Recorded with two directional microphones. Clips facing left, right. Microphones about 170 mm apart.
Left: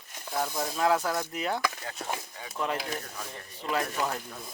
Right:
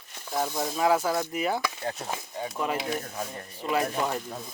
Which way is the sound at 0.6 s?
5° right (ahead or behind).